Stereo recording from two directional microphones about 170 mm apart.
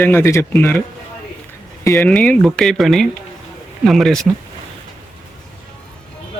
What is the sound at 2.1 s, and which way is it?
Speech, 5° left (ahead or behind).